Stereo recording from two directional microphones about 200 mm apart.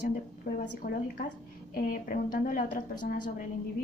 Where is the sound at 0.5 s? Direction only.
45° left (ahead or behind).